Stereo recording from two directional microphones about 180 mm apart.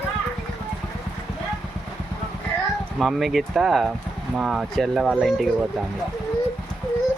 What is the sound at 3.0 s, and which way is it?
Speech, centre (ahead or behind).